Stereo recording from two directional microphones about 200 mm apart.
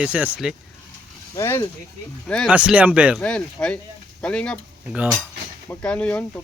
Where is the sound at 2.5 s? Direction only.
5° right (ahead or behind).